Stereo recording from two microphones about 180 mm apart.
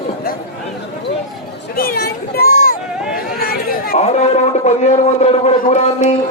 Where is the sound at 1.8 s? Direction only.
55° left (ahead or behind).